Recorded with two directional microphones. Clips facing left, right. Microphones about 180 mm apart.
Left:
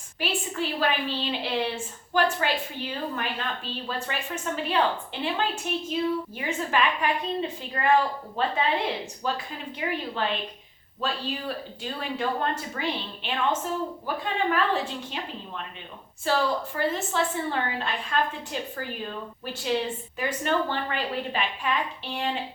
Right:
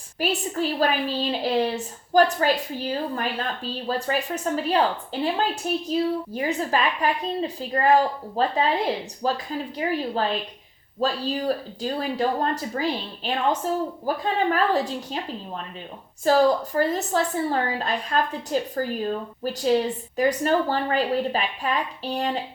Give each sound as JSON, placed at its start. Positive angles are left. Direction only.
{"t": 0.2, "sound": "a woman's voice", "side_deg": -40}